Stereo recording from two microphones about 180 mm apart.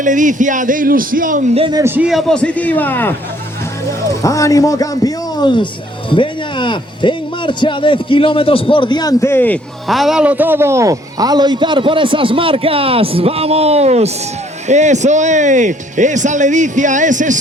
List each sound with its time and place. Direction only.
0.0 s speech: 45° right (ahead or behind)
1.5 s a man's voice: 30° right (ahead or behind)
1.8 s a man's voice: 10° right (ahead or behind); by 3.1 s 10° left (ahead or behind)
4.2 s a man's voice: 15° left (ahead or behind); by 17.3 s 45° right (ahead or behind)